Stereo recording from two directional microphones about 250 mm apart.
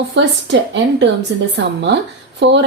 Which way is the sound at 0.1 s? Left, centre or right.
Right.